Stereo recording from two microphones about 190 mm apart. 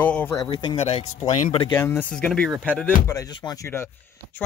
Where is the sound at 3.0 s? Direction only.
20° left (ahead or behind).